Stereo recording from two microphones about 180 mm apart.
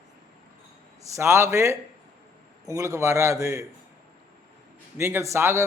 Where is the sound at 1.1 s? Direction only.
15° right (ahead or behind).